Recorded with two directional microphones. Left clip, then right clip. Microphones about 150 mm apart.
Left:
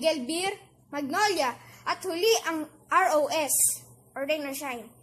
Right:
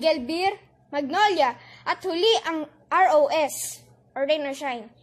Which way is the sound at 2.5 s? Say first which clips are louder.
Right 1 dB; 30° right (ahead or behind).